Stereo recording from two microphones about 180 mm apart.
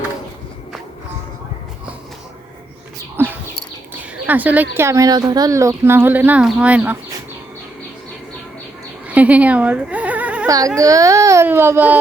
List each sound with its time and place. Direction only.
3.2 s bird: 10° right (ahead or behind)
4.3 s a woman's voice: 10° right (ahead or behind)
9.0 s a sound: 10° right (ahead or behind)
10.4 s a woman's voice: 20° right (ahead or behind)